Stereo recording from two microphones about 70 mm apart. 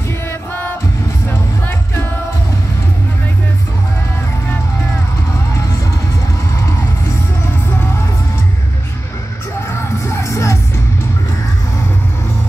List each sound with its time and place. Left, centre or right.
10.0 s music: left